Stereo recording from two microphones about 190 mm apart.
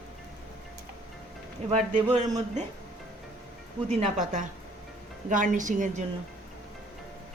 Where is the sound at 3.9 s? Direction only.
35° right (ahead or behind).